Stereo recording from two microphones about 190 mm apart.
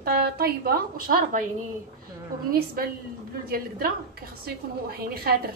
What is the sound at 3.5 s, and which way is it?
Speech, 50° right (ahead or behind).